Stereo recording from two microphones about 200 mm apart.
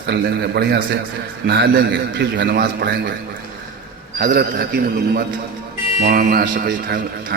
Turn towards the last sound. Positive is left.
turn(degrees=-45)  # may be behind; listen again after turning